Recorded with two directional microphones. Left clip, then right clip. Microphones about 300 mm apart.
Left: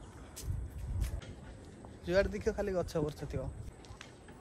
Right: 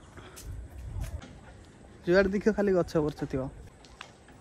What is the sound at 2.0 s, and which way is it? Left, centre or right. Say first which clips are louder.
Speech: right 7 dB; right.